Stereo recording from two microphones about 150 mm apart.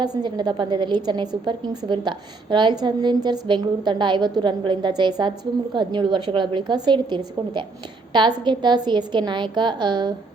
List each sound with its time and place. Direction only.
0.0 s a woman's voice: 30° right (ahead or behind)